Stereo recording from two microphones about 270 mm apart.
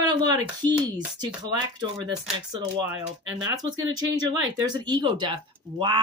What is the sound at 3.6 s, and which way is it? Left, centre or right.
Speech, centre.